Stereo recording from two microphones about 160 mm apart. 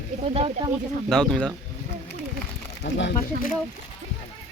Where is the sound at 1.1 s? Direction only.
5° left (ahead or behind).